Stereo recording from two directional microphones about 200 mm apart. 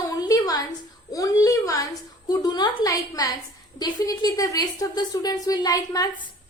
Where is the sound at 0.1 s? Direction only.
20° left (ahead or behind).